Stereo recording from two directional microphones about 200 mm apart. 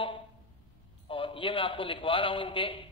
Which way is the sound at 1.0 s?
25° left (ahead or behind).